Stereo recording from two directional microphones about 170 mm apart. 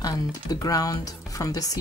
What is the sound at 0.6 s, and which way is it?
Speech, 20° left (ahead or behind).